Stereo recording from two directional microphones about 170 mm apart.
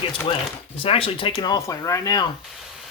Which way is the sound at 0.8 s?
30° left (ahead or behind).